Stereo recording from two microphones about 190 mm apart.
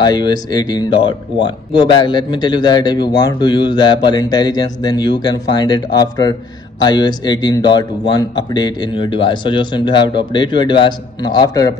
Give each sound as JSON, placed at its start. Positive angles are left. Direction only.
{"t": 0.0, "sound": "speech", "side_deg": 20}